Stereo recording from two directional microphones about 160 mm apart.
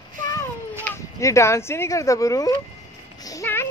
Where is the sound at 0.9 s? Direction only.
20° left (ahead or behind).